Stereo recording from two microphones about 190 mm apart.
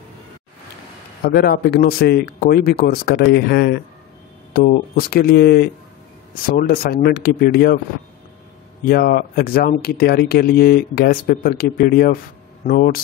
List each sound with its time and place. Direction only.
1.2 s speech: 55° left (ahead or behind)
8.8 s speech: 55° left (ahead or behind)